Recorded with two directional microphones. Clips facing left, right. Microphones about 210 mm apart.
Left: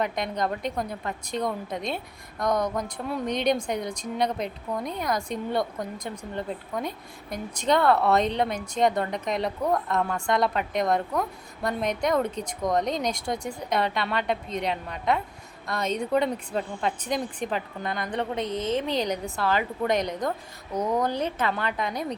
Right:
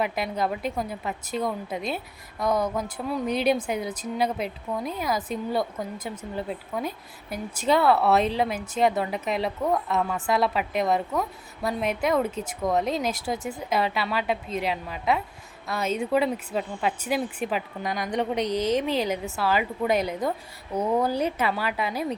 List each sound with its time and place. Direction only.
0.0 s a woman's voice: 5° right (ahead or behind)
18.5 s a woman's voice: 25° left (ahead or behind)
18.9 s a woman's voice: 5° right (ahead or behind)